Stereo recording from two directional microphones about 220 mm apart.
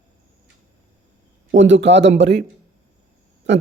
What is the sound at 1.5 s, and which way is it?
Speech, 55° right (ahead or behind).